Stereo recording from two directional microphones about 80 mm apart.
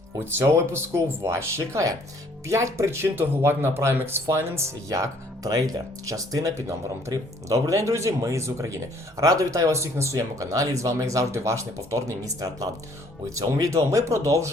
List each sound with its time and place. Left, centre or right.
1.2 s speech: right